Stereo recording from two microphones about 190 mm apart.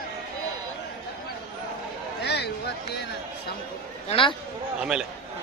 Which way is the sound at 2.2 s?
60° left (ahead or behind).